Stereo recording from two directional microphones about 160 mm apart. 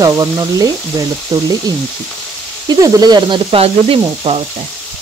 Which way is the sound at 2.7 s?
20° right (ahead or behind).